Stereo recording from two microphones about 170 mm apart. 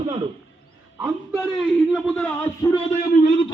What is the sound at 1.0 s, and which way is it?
Speech, 5° right (ahead or behind).